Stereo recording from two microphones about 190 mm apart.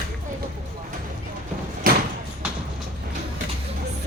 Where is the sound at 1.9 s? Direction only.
50° right (ahead or behind).